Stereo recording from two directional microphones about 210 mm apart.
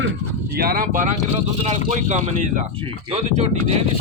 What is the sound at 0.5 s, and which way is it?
Speech, 45° right (ahead or behind).